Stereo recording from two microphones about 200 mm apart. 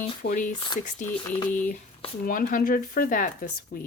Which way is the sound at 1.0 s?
10° left (ahead or behind).